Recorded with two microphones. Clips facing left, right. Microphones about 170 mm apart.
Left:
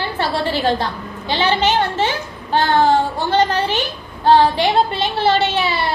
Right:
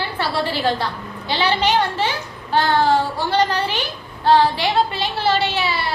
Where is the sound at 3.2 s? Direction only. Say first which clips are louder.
Left 2 dB; 20° left (ahead or behind).